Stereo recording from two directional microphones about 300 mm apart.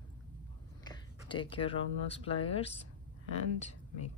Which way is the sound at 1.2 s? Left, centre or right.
Centre.